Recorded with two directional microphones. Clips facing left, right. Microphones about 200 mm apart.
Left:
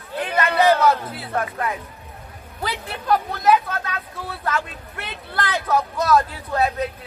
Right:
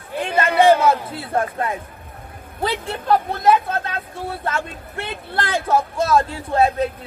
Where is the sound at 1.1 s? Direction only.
25° right (ahead or behind).